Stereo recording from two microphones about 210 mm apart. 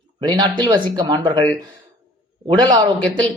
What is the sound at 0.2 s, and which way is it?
Speech, 25° right (ahead or behind).